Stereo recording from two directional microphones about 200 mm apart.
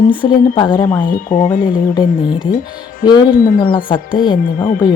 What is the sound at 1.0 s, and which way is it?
Speech, 40° left (ahead or behind).